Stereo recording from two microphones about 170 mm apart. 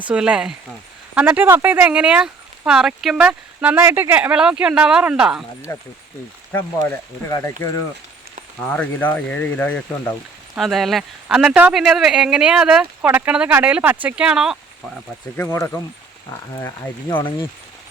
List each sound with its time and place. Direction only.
0.1 s speech: 5° right (ahead or behind)
5.7 s speech: 20° left (ahead or behind); by 14.6 s 5° right (ahead or behind)
15.4 s speech: 15° left (ahead or behind)